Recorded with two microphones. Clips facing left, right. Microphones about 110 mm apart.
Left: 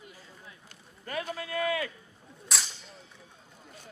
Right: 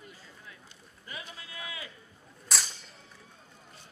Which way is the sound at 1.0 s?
55° left (ahead or behind).